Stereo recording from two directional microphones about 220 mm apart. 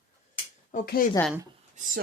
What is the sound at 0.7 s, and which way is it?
Speech, 40° left (ahead or behind).